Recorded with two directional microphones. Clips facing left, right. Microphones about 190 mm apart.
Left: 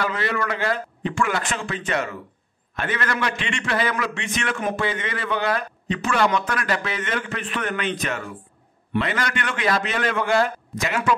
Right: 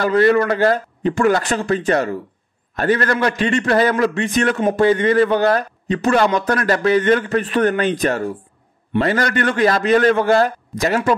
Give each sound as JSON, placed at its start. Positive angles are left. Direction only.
{"t": 0.0, "sound": "a man's voice", "side_deg": -40}